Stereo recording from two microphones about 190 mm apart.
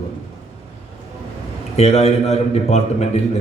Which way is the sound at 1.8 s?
35° left (ahead or behind).